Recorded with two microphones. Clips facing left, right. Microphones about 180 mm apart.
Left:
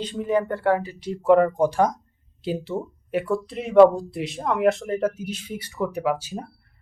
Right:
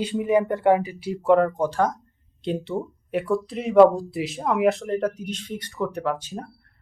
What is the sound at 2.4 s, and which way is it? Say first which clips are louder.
Speech: right 1 dB; 5° left (ahead or behind).